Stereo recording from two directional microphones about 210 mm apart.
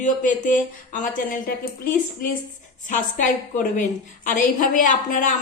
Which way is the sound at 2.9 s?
35° left (ahead or behind).